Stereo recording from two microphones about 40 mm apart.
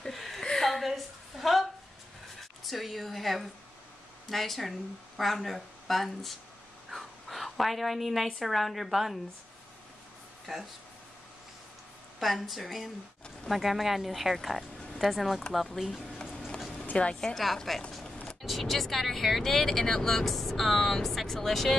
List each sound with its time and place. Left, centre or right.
0.1 s a sound: centre
2.6 s speech: centre
6.9 s a sound: centre
8.5 s speech: centre
10.5 s speech: centre
12.2 s speech: centre
16.9 s a woman's voice: left
17.7 s speech: centre